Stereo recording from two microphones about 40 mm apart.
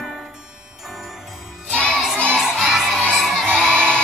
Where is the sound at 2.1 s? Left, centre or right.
Centre.